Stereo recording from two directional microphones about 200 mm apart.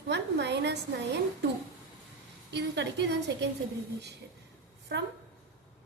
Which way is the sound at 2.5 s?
60° right (ahead or behind).